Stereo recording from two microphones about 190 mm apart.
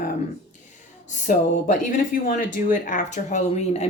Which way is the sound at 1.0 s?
40° left (ahead or behind).